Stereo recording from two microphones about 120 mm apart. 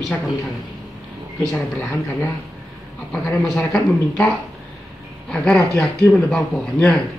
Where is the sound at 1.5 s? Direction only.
20° left (ahead or behind).